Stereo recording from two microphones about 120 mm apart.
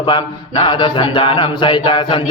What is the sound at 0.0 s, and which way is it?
A man's voice, 45° left (ahead or behind).